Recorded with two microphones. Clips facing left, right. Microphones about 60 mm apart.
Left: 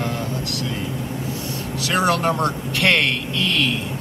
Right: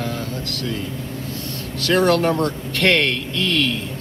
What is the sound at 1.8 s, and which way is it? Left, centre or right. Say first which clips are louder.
Speech: right 3 dB; centre.